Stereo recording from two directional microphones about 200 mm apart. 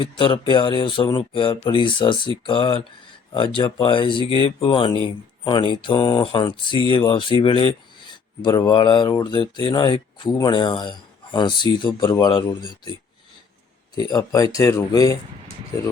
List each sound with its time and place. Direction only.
0.0 s speech: 25° left (ahead or behind)